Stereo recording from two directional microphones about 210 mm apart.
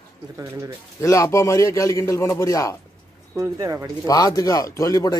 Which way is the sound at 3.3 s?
15° right (ahead or behind).